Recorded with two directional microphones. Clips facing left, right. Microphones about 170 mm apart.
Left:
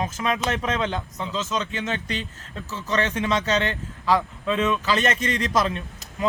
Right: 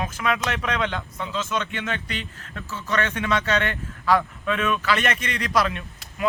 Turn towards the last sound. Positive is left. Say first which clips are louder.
# left 1 dB
turn(degrees=25)  # may be behind; listen again after turning